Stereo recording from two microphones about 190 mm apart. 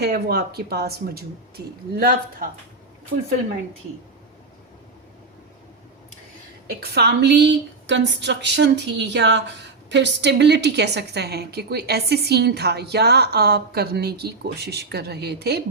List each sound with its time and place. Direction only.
0.0 s a woman's voice: 55° right (ahead or behind)
6.7 s a woman's voice: 60° right (ahead or behind)